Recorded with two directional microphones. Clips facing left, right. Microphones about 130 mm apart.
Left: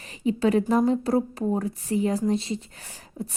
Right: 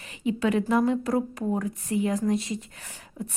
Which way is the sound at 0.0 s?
35° left (ahead or behind).